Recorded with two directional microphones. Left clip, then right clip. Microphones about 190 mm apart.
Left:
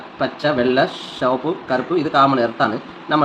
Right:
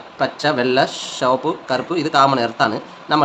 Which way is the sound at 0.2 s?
50° right (ahead or behind).